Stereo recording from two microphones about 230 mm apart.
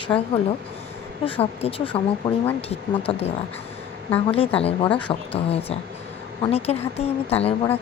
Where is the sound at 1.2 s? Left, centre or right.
Left.